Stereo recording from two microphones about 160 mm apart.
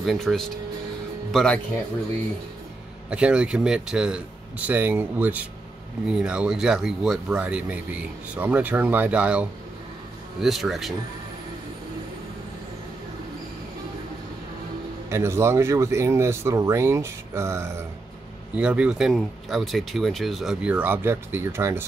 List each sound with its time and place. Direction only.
0.0 s speech: centre (ahead or behind)
3.1 s speech: 5° right (ahead or behind)
15.0 s speech: 15° right (ahead or behind)